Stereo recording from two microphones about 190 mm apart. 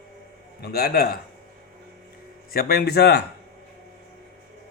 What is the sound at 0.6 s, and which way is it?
Speech, 55° left (ahead or behind).